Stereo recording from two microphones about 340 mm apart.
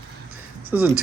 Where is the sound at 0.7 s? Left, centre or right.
Centre.